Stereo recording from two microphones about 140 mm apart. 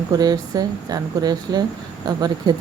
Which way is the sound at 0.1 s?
30° right (ahead or behind).